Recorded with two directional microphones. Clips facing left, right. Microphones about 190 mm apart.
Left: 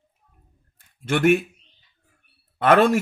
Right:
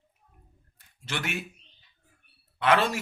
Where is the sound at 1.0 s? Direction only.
50° left (ahead or behind).